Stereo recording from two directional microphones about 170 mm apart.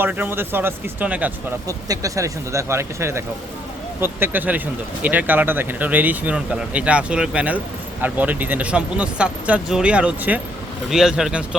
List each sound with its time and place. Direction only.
0.0 s speech: 10° right (ahead or behind)
1.6 s speech: 20° right (ahead or behind); by 11.4 s 5° right (ahead or behind)